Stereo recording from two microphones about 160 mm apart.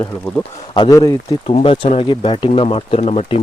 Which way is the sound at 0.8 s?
25° left (ahead or behind).